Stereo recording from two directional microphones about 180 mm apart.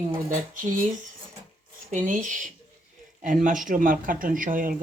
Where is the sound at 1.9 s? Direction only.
45° right (ahead or behind).